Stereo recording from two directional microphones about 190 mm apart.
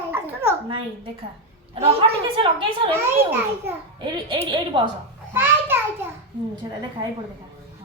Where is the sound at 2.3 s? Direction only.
25° right (ahead or behind).